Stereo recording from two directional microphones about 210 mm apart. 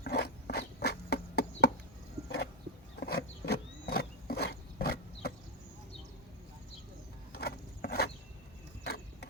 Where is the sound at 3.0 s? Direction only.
50° left (ahead or behind).